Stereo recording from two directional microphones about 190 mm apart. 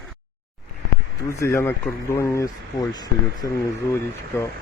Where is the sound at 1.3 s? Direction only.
15° left (ahead or behind).